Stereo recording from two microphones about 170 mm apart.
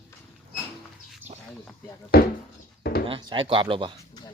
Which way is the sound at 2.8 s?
65° left (ahead or behind).